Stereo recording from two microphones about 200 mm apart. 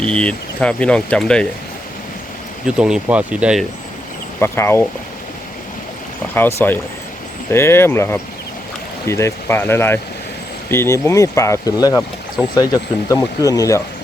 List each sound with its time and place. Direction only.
0.0 s speech: 5° left (ahead or behind)
2.6 s speech: 5° right (ahead or behind)
4.4 s speech: 10° left (ahead or behind)
6.3 s speech: 10° left (ahead or behind)